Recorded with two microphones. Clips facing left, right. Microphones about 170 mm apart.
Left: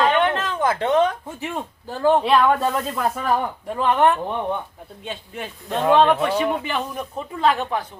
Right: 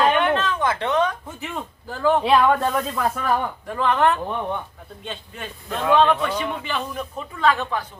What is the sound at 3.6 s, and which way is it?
Speech, 20° left (ahead or behind).